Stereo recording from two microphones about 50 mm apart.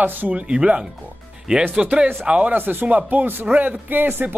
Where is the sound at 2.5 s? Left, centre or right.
Right.